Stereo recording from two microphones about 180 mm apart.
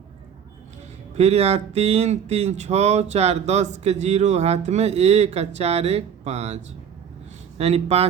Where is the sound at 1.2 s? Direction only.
35° right (ahead or behind).